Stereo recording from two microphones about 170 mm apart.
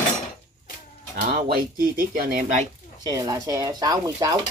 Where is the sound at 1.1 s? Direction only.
55° right (ahead or behind).